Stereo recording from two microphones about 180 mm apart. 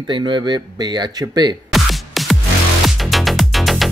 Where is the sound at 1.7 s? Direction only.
Centre (ahead or behind).